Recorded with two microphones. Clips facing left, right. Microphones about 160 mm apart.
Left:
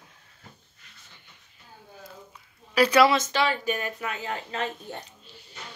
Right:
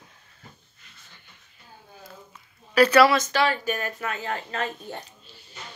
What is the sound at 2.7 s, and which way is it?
Speech, 15° left (ahead or behind).